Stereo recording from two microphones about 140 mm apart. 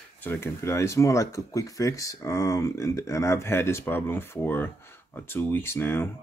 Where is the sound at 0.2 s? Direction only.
15° left (ahead or behind).